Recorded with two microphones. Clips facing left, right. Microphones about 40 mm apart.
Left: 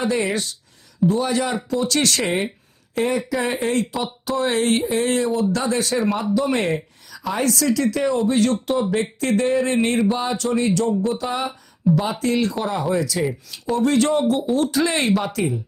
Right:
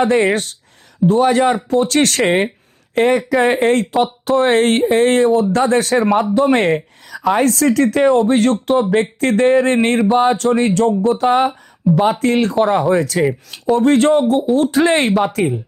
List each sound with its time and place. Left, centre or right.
0.0 s speech: right
11.9 s speech: centre
12.2 s speech: right